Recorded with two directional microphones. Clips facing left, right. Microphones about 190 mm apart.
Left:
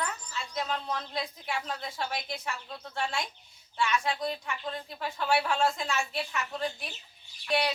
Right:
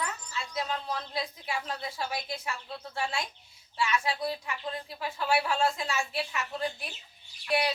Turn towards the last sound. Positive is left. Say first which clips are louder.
# even
turn(degrees=-5)  # may be behind; listen again after turning